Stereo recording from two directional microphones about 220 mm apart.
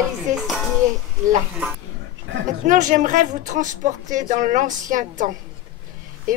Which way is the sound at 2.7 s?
35° right (ahead or behind).